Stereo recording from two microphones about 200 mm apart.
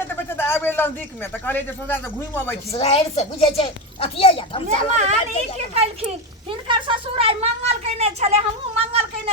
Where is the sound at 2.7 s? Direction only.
30° left (ahead or behind).